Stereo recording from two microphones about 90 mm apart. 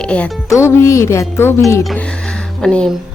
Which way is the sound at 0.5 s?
35° left (ahead or behind).